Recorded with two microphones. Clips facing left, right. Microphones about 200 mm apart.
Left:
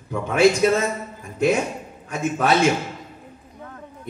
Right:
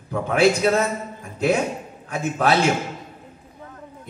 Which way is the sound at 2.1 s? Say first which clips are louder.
Even; 60° right (ahead or behind).